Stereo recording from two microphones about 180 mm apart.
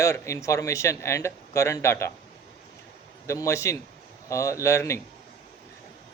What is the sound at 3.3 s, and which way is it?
Speech, 15° left (ahead or behind).